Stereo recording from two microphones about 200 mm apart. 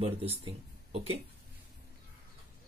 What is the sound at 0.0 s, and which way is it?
Speech, 30° right (ahead or behind).